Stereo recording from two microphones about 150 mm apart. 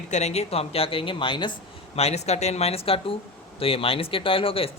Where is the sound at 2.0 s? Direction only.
45° left (ahead or behind).